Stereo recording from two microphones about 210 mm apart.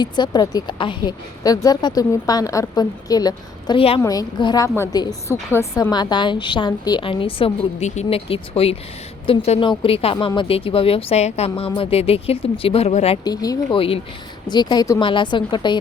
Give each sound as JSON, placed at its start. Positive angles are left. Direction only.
{"t": 0.0, "sound": "a woman's voice", "side_deg": 20}
{"t": 13.2, "sound": "a woman's voice", "side_deg": 20}